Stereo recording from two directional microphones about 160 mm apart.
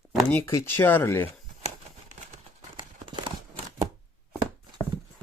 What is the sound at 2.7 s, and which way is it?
Clip-clop, 30° right (ahead or behind).